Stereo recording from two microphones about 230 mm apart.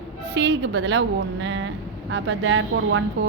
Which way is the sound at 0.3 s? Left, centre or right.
Right.